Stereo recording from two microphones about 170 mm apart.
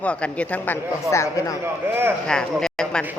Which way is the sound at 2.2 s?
5° left (ahead or behind).